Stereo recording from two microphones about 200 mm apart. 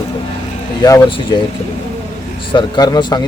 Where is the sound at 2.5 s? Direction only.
20° left (ahead or behind).